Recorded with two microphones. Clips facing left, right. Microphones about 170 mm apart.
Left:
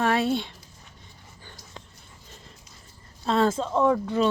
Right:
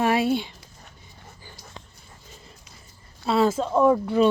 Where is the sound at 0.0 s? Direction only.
10° right (ahead or behind).